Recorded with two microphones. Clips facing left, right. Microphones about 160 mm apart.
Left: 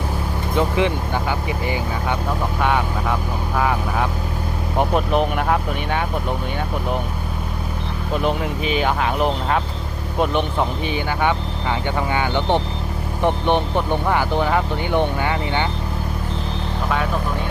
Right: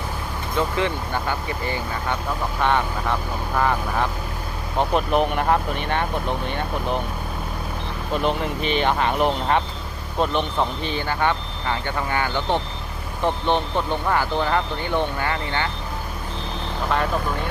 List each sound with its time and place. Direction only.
0.5 s speech: 15° left (ahead or behind)
8.1 s speech: 5° left (ahead or behind)
10.2 s speech: 15° left (ahead or behind)